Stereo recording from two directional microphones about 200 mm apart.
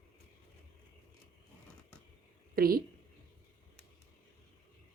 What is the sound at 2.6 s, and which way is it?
Speech, 50° right (ahead or behind).